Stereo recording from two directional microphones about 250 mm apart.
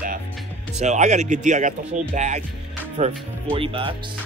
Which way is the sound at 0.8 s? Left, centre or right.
Right.